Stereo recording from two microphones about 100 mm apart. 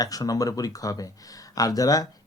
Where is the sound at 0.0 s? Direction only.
35° left (ahead or behind).